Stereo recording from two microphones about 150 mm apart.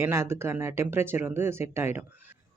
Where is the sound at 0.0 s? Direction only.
15° right (ahead or behind).